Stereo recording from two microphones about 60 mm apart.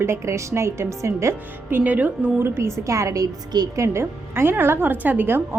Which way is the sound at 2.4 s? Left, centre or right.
Right.